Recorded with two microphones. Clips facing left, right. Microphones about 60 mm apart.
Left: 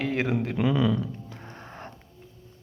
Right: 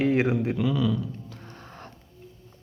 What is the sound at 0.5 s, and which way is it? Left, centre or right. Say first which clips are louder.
Speech: left 1 dB; left.